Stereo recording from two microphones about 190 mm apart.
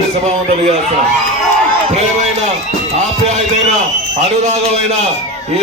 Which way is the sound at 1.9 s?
35° right (ahead or behind).